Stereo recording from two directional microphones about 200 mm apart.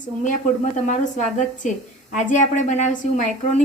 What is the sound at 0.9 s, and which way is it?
A woman's voice, 35° left (ahead or behind).